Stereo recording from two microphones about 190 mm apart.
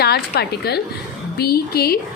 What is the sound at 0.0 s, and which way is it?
A woman's voice, 55° left (ahead or behind).